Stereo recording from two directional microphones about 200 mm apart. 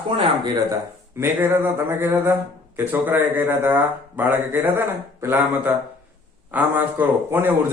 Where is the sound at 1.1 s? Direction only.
10° right (ahead or behind).